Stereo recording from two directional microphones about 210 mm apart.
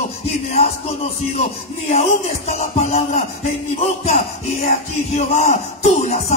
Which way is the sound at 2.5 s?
30° left (ahead or behind).